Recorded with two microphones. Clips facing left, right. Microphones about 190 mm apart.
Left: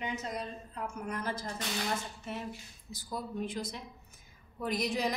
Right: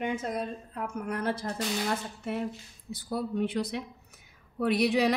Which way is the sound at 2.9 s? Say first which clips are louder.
Right 7 dB; 60° right (ahead or behind).